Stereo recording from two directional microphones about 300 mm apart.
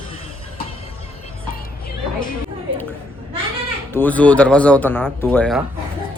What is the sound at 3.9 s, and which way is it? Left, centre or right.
Speech, centre.